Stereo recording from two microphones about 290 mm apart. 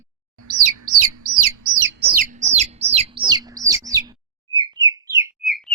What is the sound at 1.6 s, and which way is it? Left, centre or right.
Bird, right.